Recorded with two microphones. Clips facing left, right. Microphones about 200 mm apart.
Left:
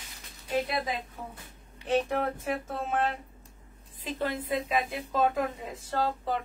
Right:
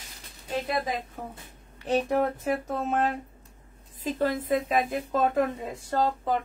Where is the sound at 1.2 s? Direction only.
45° right (ahead or behind).